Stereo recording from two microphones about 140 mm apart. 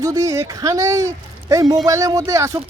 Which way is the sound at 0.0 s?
25° right (ahead or behind).